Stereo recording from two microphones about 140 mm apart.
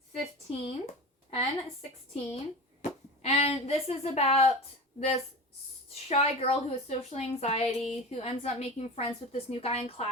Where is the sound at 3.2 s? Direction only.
45° left (ahead or behind).